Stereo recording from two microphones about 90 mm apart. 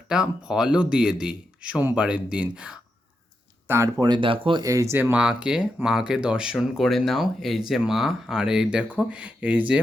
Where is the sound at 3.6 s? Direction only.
30° right (ahead or behind).